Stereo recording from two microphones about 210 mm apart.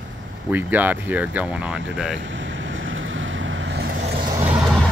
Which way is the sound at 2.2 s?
60° right (ahead or behind).